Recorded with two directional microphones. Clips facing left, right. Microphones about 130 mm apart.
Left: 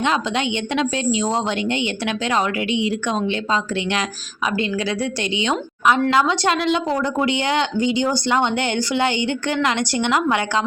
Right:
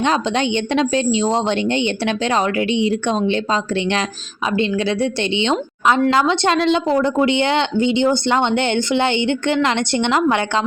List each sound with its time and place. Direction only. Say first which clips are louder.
0.0 s a woman's voice: right 3 dB; 35° right (ahead or behind)